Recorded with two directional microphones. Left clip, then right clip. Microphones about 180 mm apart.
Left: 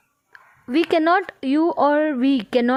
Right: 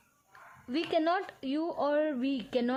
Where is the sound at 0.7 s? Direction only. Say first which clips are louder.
Left 12 dB; 40° left (ahead or behind).